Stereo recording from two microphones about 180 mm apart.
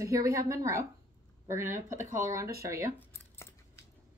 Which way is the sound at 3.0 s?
15° left (ahead or behind).